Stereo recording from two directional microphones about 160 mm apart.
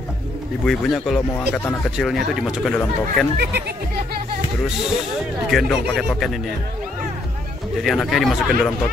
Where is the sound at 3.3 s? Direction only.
90° right.